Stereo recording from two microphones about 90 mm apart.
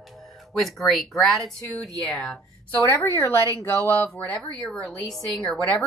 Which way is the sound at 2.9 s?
25° left (ahead or behind).